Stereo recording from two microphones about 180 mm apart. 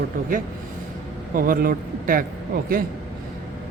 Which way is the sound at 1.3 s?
50° right (ahead or behind).